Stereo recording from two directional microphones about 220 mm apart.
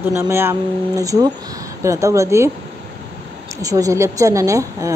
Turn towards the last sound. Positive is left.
turn(degrees=-15)  # may be behind; listen again after turning